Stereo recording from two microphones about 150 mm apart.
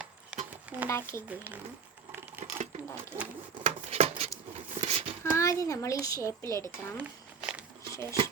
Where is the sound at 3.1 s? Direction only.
30° right (ahead or behind).